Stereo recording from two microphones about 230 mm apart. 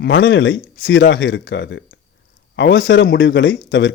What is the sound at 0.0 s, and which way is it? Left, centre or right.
Speech, left.